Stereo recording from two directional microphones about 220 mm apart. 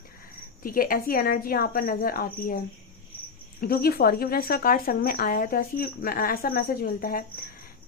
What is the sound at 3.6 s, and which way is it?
Speech, 45° left (ahead or behind).